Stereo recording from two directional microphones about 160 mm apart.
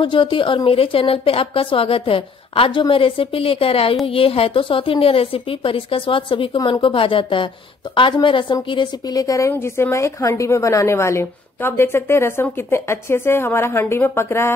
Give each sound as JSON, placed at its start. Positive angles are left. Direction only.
{"t": 0.0, "sound": "a woman's voice", "side_deg": 30}